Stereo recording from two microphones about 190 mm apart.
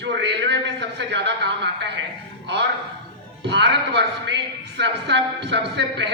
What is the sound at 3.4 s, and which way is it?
A man's voice, 65° right (ahead or behind).